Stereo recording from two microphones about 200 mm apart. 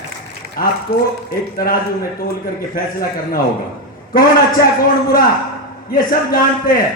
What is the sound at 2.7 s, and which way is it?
A man's voice, 45° left (ahead or behind).